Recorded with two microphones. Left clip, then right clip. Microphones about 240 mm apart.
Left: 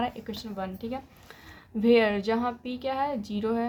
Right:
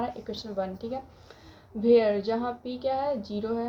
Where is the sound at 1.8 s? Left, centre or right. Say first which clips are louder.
Right 1 dB; left.